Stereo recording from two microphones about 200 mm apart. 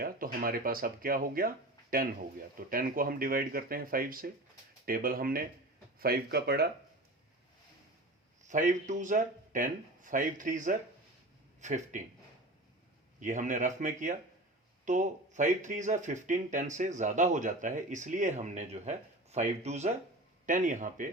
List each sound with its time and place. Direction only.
0.0 s speech: 45° right (ahead or behind)
8.4 s speech: 40° right (ahead or behind)
13.1 s speech: 40° right (ahead or behind)